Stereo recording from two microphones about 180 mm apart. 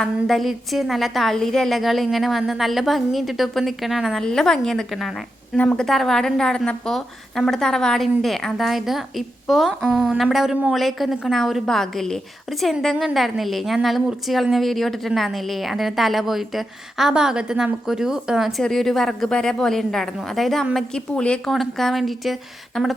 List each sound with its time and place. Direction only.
0.0 s a woman's voice: centre (ahead or behind)